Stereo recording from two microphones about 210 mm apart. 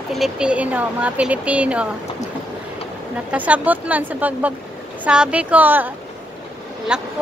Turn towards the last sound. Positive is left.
turn(degrees=-5)  # may be behind; listen again after turning